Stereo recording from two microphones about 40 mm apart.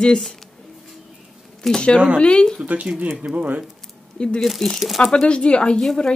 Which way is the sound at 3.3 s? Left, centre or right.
Right.